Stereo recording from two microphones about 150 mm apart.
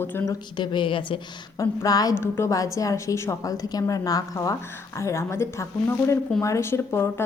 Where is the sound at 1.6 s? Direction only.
25° left (ahead or behind).